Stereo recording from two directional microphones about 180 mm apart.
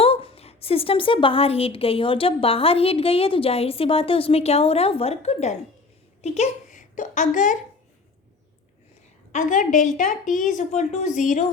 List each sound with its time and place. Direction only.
0.0 s a woman's voice: 30° left (ahead or behind)
9.3 s a woman's voice: 45° left (ahead or behind)